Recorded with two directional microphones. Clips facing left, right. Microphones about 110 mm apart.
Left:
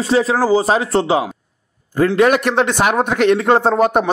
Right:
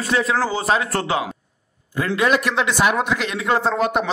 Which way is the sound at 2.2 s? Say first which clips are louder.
Left 4 dB; 55° left (ahead or behind).